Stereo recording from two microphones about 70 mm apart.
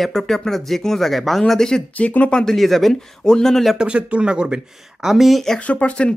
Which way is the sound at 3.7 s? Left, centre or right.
Centre.